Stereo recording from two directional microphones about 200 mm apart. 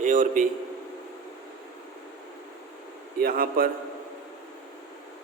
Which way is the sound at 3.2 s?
45° right (ahead or behind).